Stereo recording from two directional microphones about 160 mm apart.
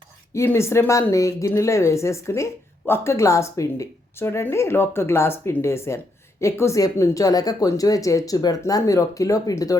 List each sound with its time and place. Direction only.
0.3 s speech: 15° left (ahead or behind)